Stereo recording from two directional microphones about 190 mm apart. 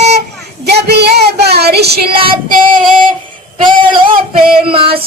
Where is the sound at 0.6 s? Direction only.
60° right (ahead or behind).